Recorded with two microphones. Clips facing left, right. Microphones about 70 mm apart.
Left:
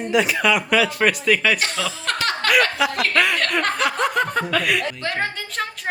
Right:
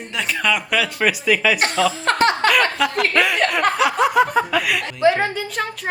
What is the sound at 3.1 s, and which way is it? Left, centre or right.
Chuckle, centre.